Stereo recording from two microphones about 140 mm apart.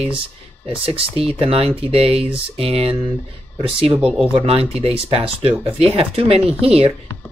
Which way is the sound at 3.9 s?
Centre (ahead or behind).